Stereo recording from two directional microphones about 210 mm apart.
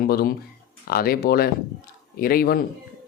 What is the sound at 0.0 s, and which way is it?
Speech, 45° left (ahead or behind).